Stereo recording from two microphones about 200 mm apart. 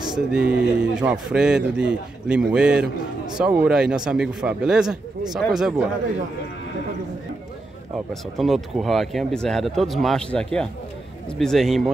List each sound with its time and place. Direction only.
0.3 s a man's voice: 5° right (ahead or behind)
8.1 s a man's voice: centre (ahead or behind)